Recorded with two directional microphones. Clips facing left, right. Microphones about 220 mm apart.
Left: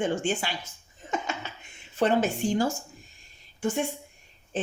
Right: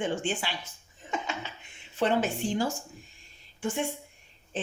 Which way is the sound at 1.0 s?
45° left (ahead or behind).